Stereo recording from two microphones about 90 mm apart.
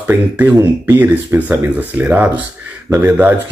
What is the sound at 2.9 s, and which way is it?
Speech, 30° right (ahead or behind).